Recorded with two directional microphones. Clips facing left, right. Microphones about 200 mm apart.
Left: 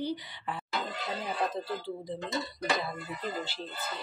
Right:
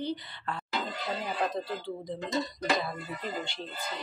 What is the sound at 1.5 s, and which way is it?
Speech, 5° left (ahead or behind).